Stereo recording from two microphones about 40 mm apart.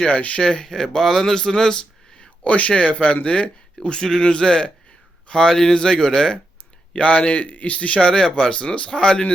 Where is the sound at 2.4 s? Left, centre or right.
Left; by 6.4 s centre.